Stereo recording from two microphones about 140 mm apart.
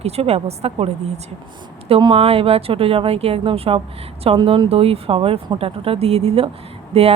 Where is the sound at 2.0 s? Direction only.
40° right (ahead or behind).